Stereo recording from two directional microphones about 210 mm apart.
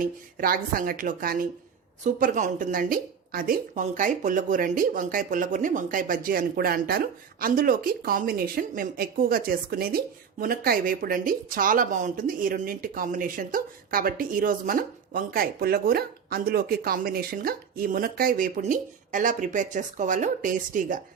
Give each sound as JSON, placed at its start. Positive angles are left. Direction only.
{"t": 0.0, "sound": "speech", "side_deg": -45}